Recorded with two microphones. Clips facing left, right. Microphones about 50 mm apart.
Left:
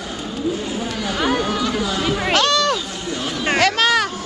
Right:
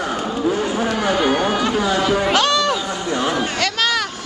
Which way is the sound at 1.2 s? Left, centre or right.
Right.